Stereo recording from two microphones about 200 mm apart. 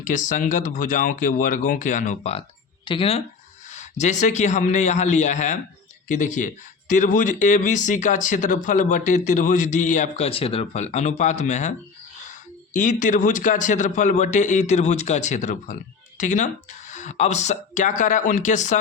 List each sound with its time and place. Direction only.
0.0 s speech: 40° left (ahead or behind)
12.7 s speech: 40° left (ahead or behind)